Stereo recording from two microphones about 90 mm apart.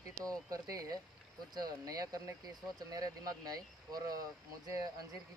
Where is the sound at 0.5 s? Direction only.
40° right (ahead or behind).